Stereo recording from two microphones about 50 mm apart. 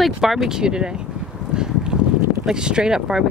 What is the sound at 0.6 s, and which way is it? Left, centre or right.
Speech, centre.